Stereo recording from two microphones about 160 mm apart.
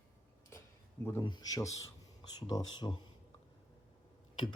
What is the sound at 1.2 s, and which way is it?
Speech, 25° left (ahead or behind).